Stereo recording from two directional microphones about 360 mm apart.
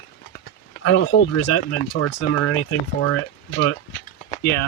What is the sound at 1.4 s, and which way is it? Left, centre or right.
Speech, left.